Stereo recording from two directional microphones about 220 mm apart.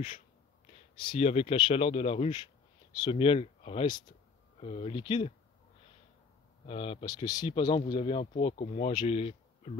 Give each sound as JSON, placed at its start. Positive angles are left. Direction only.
{"t": 1.0, "sound": "speech", "side_deg": 25}
{"t": 6.6, "sound": "speech", "side_deg": 25}